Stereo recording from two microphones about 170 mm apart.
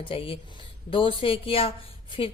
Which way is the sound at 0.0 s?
35° left (ahead or behind).